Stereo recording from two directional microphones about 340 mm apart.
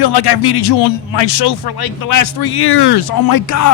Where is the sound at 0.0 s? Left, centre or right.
Left.